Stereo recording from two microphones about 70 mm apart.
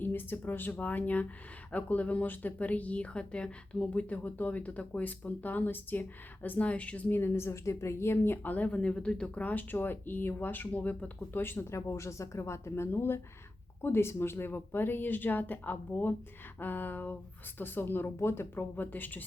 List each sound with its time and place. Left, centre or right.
0.0 s speech: left
7.2 s speech: left
11.7 s a woman's voice: left